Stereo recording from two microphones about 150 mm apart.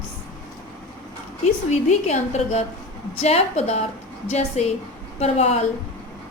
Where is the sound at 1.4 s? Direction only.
50° left (ahead or behind).